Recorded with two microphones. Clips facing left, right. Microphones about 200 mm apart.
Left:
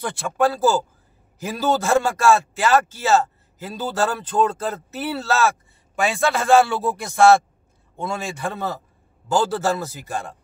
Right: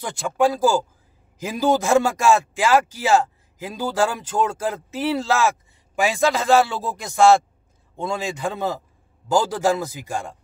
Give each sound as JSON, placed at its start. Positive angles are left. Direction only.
{"t": 0.0, "sound": "speech", "side_deg": -15}